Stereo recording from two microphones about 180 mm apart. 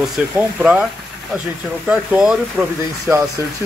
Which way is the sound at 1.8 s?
5° right (ahead or behind).